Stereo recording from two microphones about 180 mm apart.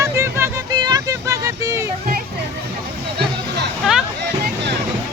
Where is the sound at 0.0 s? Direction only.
15° right (ahead or behind).